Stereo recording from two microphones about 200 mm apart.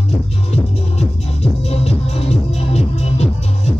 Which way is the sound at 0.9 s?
30° left (ahead or behind).